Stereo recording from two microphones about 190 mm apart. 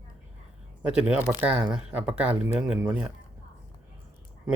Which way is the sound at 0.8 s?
5° right (ahead or behind).